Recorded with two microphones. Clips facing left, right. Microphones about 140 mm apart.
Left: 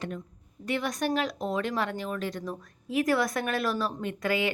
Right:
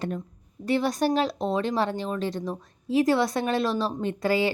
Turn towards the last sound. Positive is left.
turn(degrees=-30)  # may be behind; listen again after turning